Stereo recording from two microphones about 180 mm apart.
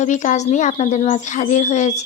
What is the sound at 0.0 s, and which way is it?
Speech, 45° left (ahead or behind).